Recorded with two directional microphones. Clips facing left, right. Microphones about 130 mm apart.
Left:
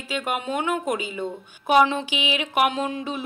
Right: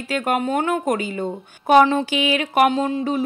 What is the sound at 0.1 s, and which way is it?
A woman's voice, 45° right (ahead or behind).